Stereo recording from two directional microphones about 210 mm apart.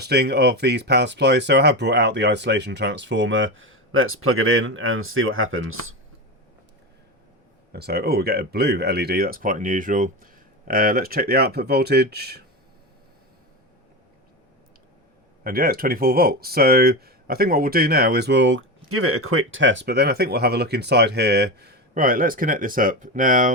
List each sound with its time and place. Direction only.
0.0 s speech: 50° right (ahead or behind); by 5.9 s 75° right (ahead or behind)
7.7 s speech: 50° right (ahead or behind)
15.4 s speech: 45° right (ahead or behind)